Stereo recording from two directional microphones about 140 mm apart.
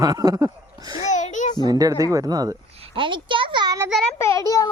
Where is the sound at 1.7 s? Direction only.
25° right (ahead or behind).